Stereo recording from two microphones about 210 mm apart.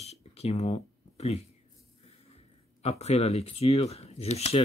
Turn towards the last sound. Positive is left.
turn(degrees=30)  # may be behind; listen again after turning